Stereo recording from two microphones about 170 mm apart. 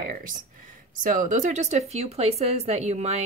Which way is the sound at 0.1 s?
55° right (ahead or behind).